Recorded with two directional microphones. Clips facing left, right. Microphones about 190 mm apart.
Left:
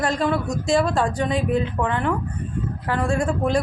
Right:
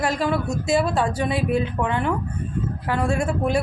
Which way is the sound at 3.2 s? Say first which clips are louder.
Left 1 dB; 5° right (ahead or behind).